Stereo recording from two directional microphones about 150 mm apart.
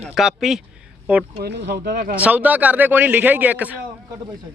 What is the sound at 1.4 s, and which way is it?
Speech, 90° right.